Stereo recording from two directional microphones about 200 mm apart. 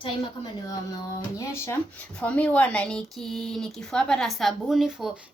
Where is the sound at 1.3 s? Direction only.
15° left (ahead or behind).